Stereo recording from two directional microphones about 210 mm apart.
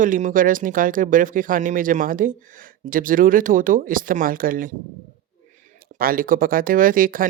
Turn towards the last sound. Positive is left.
turn(degrees=-40)  # may be behind; listen again after turning